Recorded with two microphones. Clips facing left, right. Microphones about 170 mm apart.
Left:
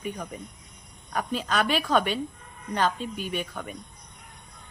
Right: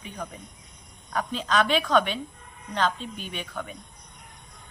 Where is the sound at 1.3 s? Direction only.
10° left (ahead or behind).